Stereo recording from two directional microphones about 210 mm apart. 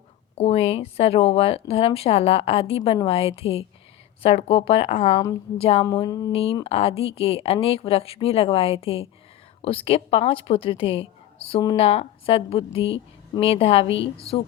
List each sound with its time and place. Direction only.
0.3 s a woman's voice: 30° left (ahead or behind)
5.1 s a woman's voice: 15° left (ahead or behind)
5.5 s a woman's voice: 30° left (ahead or behind)
6.3 s a woman's voice: 30° left (ahead or behind)